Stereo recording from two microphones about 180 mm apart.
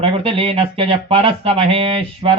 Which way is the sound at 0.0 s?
30° right (ahead or behind).